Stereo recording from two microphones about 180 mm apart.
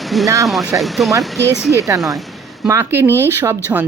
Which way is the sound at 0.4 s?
Centre (ahead or behind).